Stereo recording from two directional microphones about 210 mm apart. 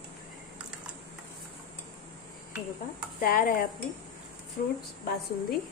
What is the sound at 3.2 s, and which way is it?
Dishes, 45° left (ahead or behind).